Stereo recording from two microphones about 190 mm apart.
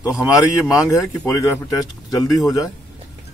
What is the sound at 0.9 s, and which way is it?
A man's voice, 15° left (ahead or behind).